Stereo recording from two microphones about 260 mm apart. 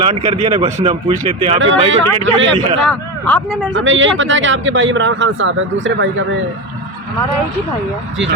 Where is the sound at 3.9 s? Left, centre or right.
Right.